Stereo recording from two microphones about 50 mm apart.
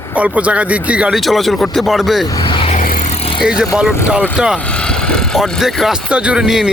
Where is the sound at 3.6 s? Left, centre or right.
Centre.